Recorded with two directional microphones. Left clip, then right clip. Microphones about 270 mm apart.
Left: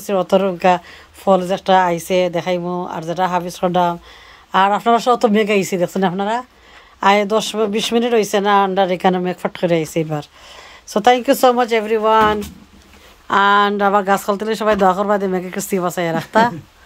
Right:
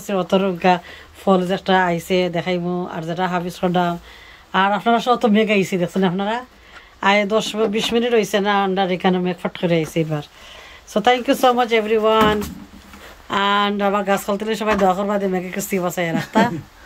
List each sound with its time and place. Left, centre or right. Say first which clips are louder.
0.0 s speech: left 4 dB; centre